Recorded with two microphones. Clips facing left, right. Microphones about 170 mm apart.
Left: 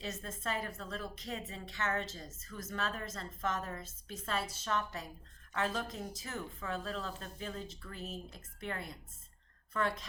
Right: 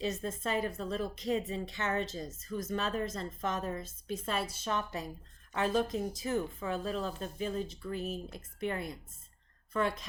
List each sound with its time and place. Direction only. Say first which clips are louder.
0.0 s a woman's voice: right 6 dB; 20° right (ahead or behind)